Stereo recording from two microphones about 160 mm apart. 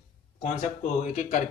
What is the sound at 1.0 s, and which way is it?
Speech, 50° left (ahead or behind).